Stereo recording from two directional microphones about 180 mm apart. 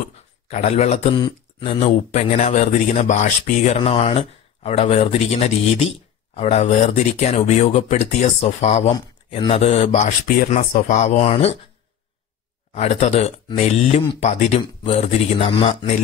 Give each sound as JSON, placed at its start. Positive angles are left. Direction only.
{"t": 0.5, "sound": "speech", "side_deg": 40}
{"t": 12.7, "sound": "speech", "side_deg": 35}